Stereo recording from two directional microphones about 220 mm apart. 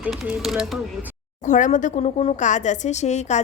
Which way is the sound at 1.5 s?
35° left (ahead or behind).